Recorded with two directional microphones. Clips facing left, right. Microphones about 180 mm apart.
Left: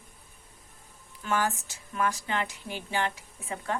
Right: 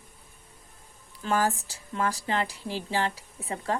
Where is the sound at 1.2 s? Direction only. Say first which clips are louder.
Right 3 dB; 35° right (ahead or behind).